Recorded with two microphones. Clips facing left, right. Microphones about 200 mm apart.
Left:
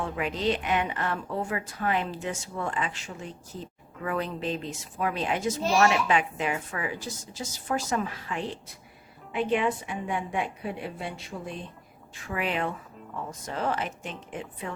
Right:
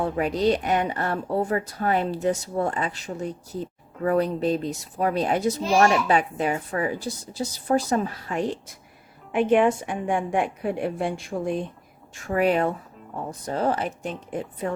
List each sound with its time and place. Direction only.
0.0 s a woman's voice: 40° right (ahead or behind)